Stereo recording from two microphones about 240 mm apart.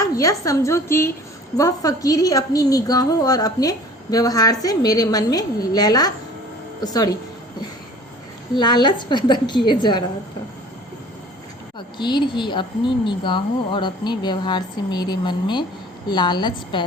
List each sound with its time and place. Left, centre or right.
0.0 s a woman's voice: centre
8.5 s speech: centre
11.9 s a woman's voice: centre